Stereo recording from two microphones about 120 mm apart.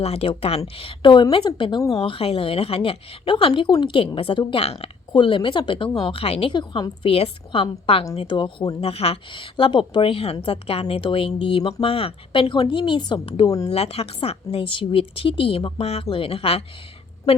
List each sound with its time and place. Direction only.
0.0 s speech: 55° left (ahead or behind)
5.1 s speech: 45° left (ahead or behind)
13.7 s speech: 55° left (ahead or behind)